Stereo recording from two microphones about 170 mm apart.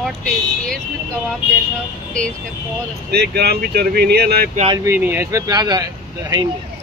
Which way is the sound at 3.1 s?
70° right (ahead or behind).